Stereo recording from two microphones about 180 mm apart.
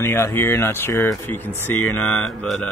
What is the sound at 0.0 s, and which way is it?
Speech, 15° left (ahead or behind).